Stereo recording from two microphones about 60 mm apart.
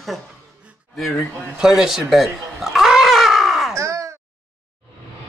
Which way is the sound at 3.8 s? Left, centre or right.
Right.